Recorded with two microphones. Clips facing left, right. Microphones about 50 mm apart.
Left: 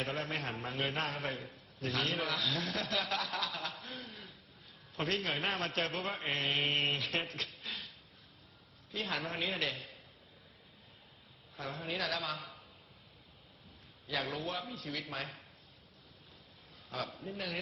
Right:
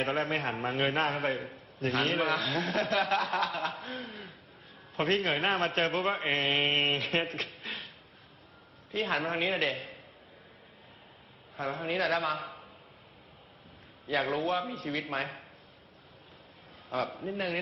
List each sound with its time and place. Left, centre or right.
0.0 s a man's voice: right
8.9 s a man's voice: right
11.5 s a man's voice: right
14.1 s a man's voice: right
16.9 s a man's voice: right